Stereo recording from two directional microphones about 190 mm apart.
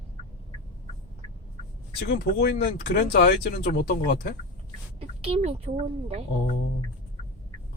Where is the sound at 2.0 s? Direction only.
55° left (ahead or behind).